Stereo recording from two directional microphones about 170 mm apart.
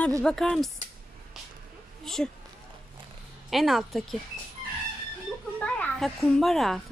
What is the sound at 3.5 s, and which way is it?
Speech, centre (ahead or behind).